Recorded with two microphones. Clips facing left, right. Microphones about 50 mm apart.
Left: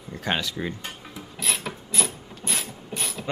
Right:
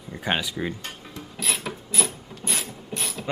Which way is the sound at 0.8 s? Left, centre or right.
Centre.